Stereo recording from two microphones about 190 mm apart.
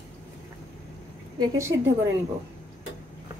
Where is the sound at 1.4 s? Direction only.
15° right (ahead or behind).